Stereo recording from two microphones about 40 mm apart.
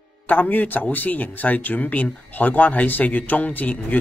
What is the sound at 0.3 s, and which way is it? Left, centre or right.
A man's voice, left.